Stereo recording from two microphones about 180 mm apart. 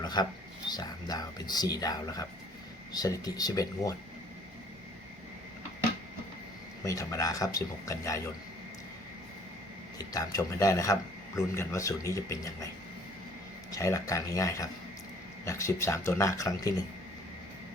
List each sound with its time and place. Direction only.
0.0 s a sound: 25° left (ahead or behind)
0.7 s speech: 20° left (ahead or behind)
6.8 s speech: 20° left (ahead or behind)
10.0 s speech: 20° left (ahead or behind)
13.7 s speech: 20° left (ahead or behind)